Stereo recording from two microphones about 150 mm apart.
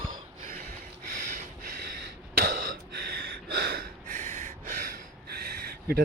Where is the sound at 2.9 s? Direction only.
90° right; by 4.4 s 60° right (ahead or behind).